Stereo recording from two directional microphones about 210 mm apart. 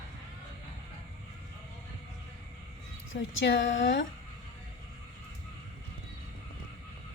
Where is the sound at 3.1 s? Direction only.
65° left (ahead or behind).